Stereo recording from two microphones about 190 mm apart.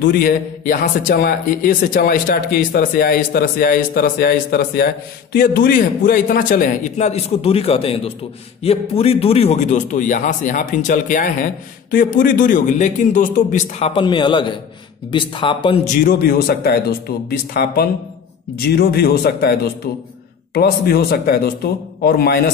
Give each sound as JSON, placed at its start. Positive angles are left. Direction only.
{"t": 0.0, "sound": "a man's voice", "side_deg": 50}